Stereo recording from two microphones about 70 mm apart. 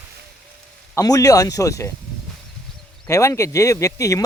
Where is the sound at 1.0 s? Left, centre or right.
Left.